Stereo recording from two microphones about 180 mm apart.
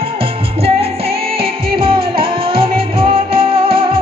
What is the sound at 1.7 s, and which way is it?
Music, 30° right (ahead or behind).